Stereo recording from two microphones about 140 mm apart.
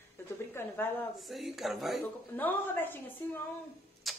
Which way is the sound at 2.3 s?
15° left (ahead or behind).